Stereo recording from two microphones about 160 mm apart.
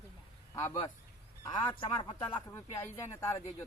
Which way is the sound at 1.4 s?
25° left (ahead or behind).